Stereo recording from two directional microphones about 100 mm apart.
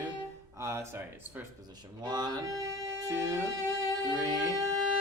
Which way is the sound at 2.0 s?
45° right (ahead or behind).